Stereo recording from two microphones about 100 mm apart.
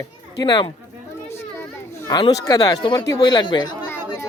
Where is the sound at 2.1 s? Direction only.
40° left (ahead or behind).